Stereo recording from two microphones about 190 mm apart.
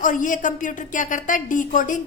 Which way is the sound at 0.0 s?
45° left (ahead or behind).